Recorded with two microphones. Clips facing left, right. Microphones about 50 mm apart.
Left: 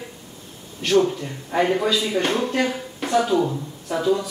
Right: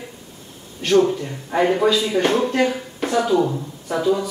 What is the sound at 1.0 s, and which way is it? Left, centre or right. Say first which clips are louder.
Speech: right 3 dB; centre.